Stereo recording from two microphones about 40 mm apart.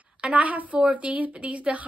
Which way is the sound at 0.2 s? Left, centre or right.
Right.